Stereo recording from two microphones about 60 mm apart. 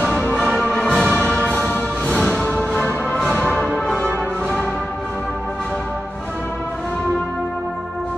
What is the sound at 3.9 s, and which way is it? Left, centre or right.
Music, left.